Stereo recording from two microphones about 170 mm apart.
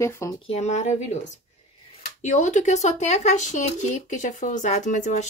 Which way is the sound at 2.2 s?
45° left (ahead or behind).